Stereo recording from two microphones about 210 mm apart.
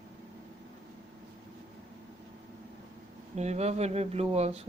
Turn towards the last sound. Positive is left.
turn(degrees=-30)  # may be behind; listen again after turning